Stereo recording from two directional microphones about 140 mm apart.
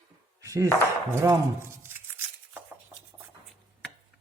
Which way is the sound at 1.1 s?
20° right (ahead or behind).